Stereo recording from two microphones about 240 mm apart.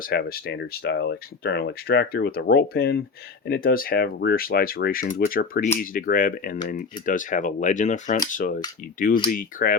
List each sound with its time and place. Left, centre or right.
0.0 s speech: left